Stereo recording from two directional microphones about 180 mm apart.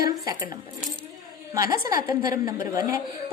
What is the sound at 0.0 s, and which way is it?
A woman's voice, 20° right (ahead or behind).